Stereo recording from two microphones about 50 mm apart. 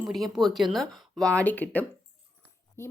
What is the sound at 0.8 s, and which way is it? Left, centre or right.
Speech, centre.